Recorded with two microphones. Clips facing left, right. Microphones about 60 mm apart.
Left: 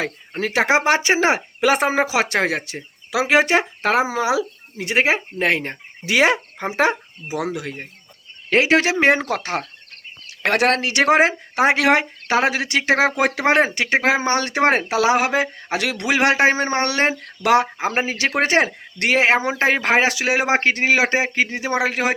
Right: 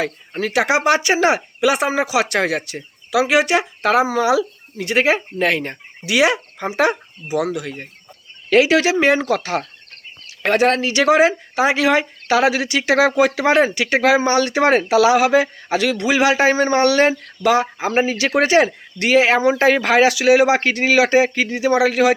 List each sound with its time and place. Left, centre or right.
0.0 s speech: left
8.4 s speech: left
10.4 s speech: left
12.3 s speech: left
15.8 s speech: left
16.5 s speech: left
17.4 s speech: left